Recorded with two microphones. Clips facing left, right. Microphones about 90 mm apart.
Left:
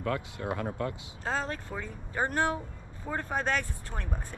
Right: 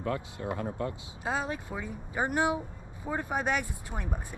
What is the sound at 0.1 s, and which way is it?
Speech, 65° left (ahead or behind).